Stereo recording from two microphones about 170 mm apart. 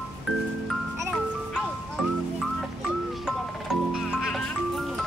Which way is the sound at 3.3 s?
5° right (ahead or behind).